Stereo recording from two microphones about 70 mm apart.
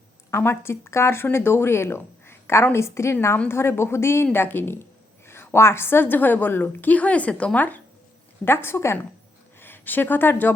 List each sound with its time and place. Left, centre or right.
0.3 s a woman's voice: left
8.4 s speech: left